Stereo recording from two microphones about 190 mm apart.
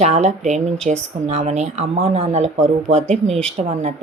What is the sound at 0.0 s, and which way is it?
Speech, 35° right (ahead or behind).